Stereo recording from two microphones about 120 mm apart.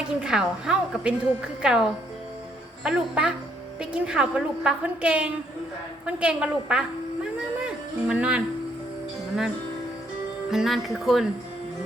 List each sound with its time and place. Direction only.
0.2 s a woman's voice: 5° right (ahead or behind)
10.5 s speech: centre (ahead or behind)